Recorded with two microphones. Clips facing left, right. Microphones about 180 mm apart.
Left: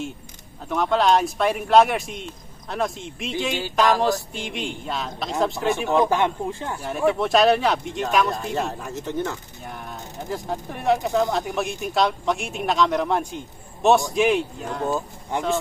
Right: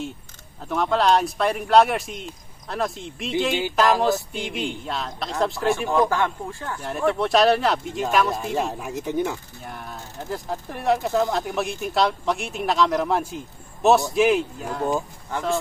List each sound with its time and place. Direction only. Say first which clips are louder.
0.7 s speech: even; centre (ahead or behind)
5.9 s speech: left 4 dB; 20° left (ahead or behind)
6.8 s speech: left 1 dB; 5° left (ahead or behind); by 9.4 s 15° right (ahead or behind)
9.7 s speech: left 1 dB; centre (ahead or behind)